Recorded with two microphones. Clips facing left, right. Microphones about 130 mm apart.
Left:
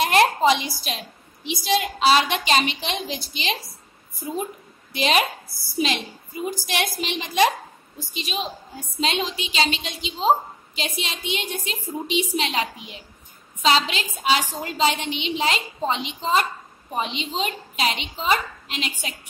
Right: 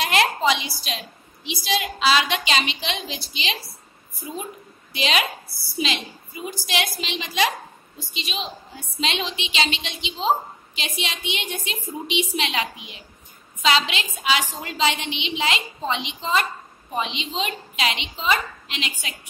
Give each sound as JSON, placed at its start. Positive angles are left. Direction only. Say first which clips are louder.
{"t": 0.0, "sound": "a woman's voice", "louder": "left 3 dB", "side_deg": 45}
{"t": 4.9, "sound": "a woman's voice", "louder": "left 3 dB", "side_deg": 50}